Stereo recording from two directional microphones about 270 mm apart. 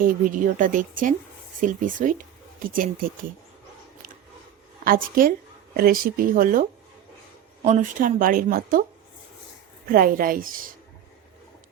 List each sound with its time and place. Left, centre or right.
0.0 s speech: right
4.8 s speech: right
9.8 s speech: right